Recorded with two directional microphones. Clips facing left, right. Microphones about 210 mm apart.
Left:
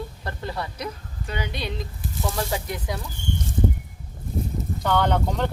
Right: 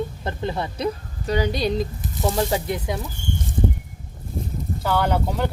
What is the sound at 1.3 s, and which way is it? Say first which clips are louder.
Speech: right 9 dB; 40° right (ahead or behind).